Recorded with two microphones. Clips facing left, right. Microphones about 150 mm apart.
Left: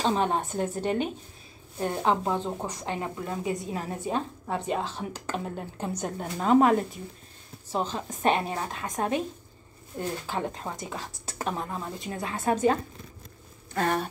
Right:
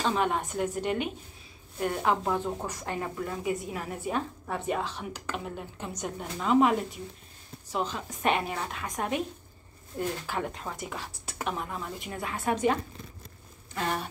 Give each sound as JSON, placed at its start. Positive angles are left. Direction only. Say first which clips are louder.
{"t": 0.0, "sound": "speech", "louder": "left 2 dB", "side_deg": 30}
{"t": 7.7, "sound": "speech", "louder": "left 2 dB", "side_deg": 30}
{"t": 13.7, "sound": "speech", "louder": "left 5 dB", "side_deg": 50}